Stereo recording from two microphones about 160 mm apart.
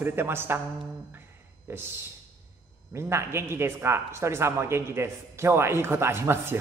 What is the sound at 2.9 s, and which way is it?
Speech, 15° right (ahead or behind).